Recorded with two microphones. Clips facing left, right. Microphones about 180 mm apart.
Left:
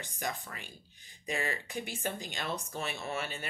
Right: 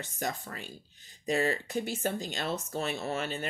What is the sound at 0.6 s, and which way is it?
Speech, 15° left (ahead or behind).